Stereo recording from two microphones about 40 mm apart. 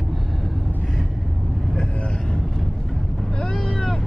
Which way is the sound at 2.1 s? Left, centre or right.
Centre.